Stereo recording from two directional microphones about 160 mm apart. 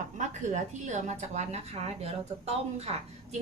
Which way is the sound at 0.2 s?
50° right (ahead or behind).